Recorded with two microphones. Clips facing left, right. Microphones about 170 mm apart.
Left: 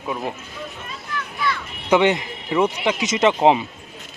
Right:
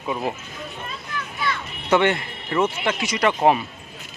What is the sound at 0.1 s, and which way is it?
Speech, 5° right (ahead or behind).